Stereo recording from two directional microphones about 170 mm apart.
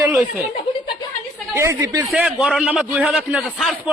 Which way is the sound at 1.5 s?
15° right (ahead or behind).